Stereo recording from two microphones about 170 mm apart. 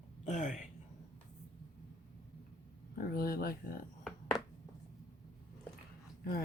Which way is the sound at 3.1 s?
60° left (ahead or behind).